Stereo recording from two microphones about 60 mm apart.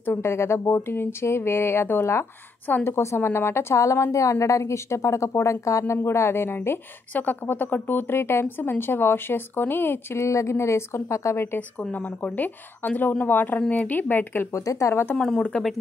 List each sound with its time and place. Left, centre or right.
0.0 s speech: left
3.7 s a woman's voice: left
7.2 s speech: left
10.1 s speech: left
11.9 s speech: left
14.5 s a woman's voice: left
14.9 s speech: left
15.1 s speech: centre